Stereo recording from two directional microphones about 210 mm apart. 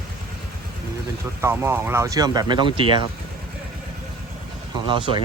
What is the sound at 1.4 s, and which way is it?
Speech, 10° right (ahead or behind).